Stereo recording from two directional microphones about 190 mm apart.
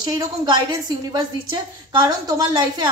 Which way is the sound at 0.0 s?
20° right (ahead or behind).